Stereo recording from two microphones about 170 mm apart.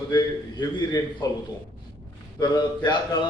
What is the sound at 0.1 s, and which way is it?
A man's voice, 25° left (ahead or behind).